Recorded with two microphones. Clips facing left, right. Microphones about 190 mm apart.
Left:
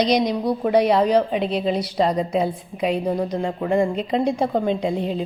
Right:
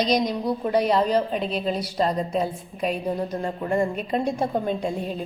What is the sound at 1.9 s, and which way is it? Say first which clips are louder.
A woman's voice: left 3 dB; 15° left (ahead or behind).